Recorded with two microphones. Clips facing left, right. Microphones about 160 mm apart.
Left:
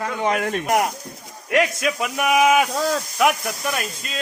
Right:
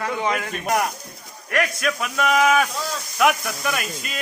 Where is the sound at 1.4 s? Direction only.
20° left (ahead or behind).